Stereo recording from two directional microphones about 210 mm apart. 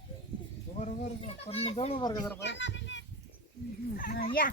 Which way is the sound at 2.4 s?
60° left (ahead or behind).